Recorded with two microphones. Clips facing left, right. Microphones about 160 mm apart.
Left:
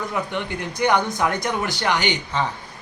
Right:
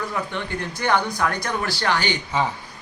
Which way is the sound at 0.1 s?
15° left (ahead or behind).